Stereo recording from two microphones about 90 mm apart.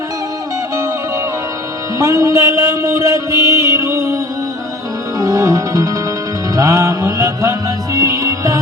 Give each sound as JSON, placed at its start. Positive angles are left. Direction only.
{"t": 2.0, "sound": "a sound", "side_deg": -35}
{"t": 5.2, "sound": "music", "side_deg": -40}
{"t": 6.6, "sound": "mantra", "side_deg": -35}
{"t": 7.9, "sound": "music", "side_deg": -40}